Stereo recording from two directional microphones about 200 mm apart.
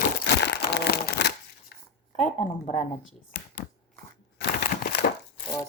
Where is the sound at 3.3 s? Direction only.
50° left (ahead or behind).